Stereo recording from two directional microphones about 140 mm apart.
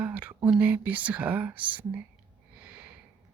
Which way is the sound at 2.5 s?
10° right (ahead or behind).